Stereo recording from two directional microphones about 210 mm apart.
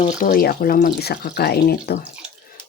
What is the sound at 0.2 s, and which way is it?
Speech, 40° left (ahead or behind).